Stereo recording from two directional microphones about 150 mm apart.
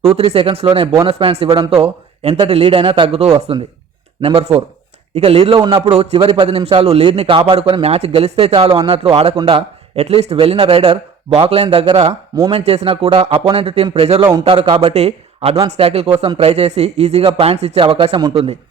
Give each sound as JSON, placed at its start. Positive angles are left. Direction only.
{"t": 0.0, "sound": "a man's voice", "side_deg": -40}
{"t": 5.9, "sound": "a man's voice", "side_deg": -40}